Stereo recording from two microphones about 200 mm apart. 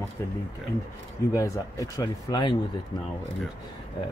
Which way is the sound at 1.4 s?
15° left (ahead or behind).